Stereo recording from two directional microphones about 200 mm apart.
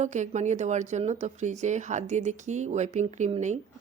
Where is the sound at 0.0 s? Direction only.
35° right (ahead or behind).